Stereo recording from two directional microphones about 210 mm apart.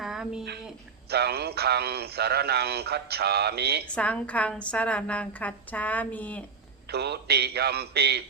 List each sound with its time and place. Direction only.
0.0 s a sound: centre (ahead or behind)
1.1 s a man's voice: 50° right (ahead or behind)
3.8 s a woman's voice: 5° left (ahead or behind)
6.9 s a man's voice: 50° right (ahead or behind)